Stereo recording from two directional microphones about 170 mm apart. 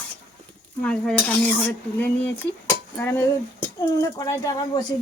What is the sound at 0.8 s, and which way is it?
Speech, 5° left (ahead or behind).